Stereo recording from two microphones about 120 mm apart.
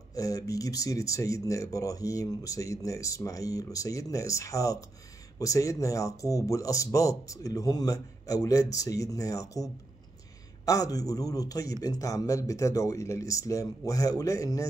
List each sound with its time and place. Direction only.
0.1 s speech: 30° left (ahead or behind)